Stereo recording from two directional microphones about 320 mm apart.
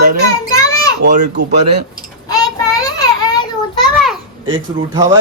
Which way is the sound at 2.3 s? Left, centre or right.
Centre.